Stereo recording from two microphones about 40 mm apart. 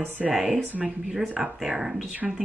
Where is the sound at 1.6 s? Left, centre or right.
Centre.